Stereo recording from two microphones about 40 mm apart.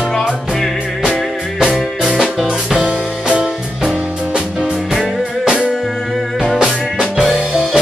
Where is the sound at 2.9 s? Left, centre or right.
Right; by 6.6 s centre.